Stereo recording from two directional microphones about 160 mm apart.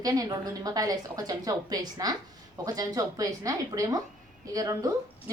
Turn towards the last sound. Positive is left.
turn(degrees=-20)  # may be behind; listen again after turning